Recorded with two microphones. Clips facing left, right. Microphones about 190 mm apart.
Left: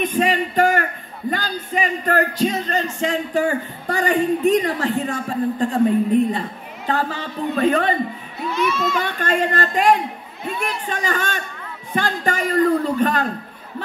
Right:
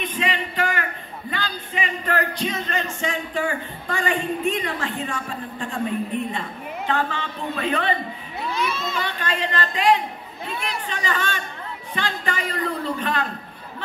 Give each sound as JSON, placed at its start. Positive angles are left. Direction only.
{"t": 0.0, "sound": "a man's voice", "side_deg": 45}
{"t": 1.3, "sound": "music", "side_deg": 45}
{"t": 9.0, "sound": "a man's voice", "side_deg": 50}